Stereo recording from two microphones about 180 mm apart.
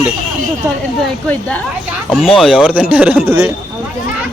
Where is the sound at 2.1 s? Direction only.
Centre (ahead or behind).